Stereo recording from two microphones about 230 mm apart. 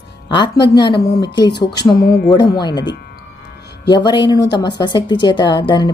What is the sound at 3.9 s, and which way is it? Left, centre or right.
A woman's voice, centre.